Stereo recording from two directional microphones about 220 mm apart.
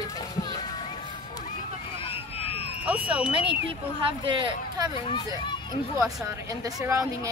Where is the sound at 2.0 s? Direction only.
25° left (ahead or behind).